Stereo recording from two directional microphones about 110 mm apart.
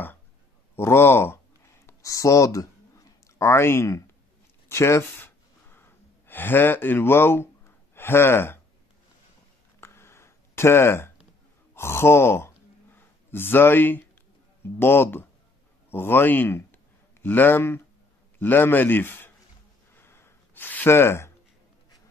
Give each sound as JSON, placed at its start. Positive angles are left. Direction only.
{"t": 0.7, "sound": "a man's voice", "side_deg": 20}
{"t": 1.9, "sound": "a sound", "side_deg": 30}
{"t": 4.6, "sound": "gasp", "side_deg": 25}
{"t": 9.8, "sound": "a sound", "side_deg": 25}
{"t": 11.7, "sound": "sigh", "side_deg": 25}
{"t": 14.6, "sound": "a man's voice", "side_deg": 20}
{"t": 19.9, "sound": "gasp", "side_deg": 20}